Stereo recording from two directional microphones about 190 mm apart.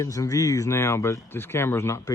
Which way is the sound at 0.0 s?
15° left (ahead or behind).